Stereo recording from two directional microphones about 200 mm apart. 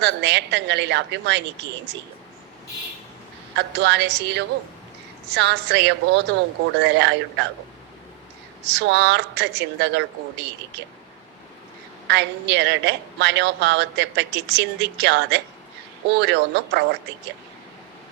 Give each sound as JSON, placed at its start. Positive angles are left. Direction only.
{"t": 0.0, "sound": "a woman's voice", "side_deg": -60}
{"t": 3.5, "sound": "a woman's voice", "side_deg": -60}
{"t": 8.6, "sound": "a woman's voice", "side_deg": -60}
{"t": 12.0, "sound": "a woman's voice", "side_deg": -60}